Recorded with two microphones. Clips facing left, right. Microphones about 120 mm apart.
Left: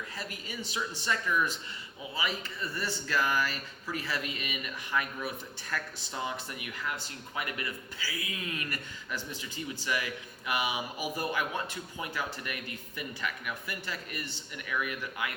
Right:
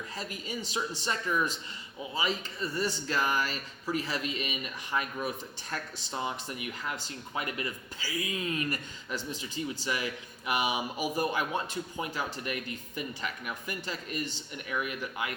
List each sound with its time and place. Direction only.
0.2 s speech: 20° right (ahead or behind)